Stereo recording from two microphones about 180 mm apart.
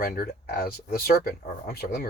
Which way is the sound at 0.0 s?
55° left (ahead or behind).